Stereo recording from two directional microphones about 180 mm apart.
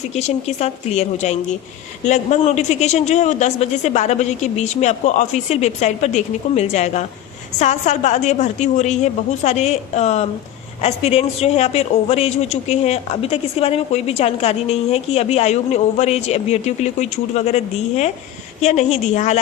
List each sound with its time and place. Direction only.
0.1 s a man's voice: 35° left (ahead or behind)